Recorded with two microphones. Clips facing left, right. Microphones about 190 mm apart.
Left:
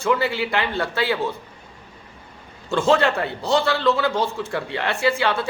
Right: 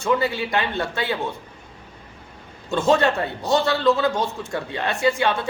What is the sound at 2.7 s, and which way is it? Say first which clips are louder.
Speech: even; 20° right (ahead or behind).